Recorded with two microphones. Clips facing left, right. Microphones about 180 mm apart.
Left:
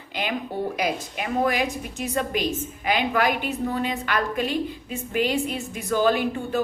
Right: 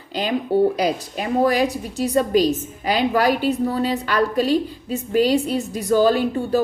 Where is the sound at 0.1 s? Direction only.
35° right (ahead or behind).